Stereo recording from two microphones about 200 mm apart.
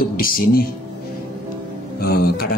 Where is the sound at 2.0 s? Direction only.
50° left (ahead or behind).